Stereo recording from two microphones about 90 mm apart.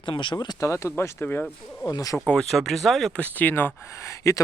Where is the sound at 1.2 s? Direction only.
15° left (ahead or behind).